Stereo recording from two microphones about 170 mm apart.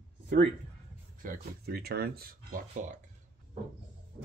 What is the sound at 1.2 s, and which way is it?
Speech, 60° right (ahead or behind).